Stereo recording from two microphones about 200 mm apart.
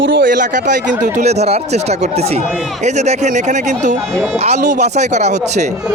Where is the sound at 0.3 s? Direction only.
40° right (ahead or behind).